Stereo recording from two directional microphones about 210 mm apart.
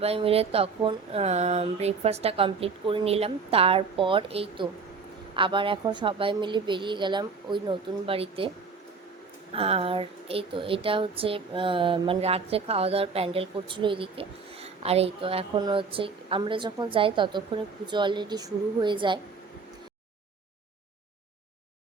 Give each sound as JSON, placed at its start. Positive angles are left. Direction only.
{"t": 0.0, "sound": "speech", "side_deg": -30}
{"t": 9.5, "sound": "speech", "side_deg": -25}